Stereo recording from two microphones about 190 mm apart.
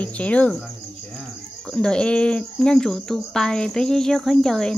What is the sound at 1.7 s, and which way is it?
Speech, 5° left (ahead or behind).